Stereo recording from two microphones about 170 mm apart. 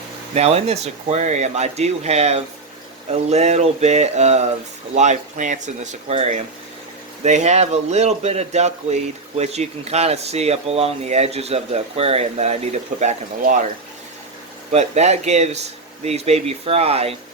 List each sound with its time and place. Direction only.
0.3 s speech: 40° right (ahead or behind)
14.7 s speech: 40° right (ahead or behind)